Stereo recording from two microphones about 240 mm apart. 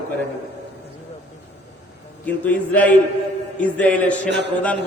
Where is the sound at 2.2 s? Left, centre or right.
Centre.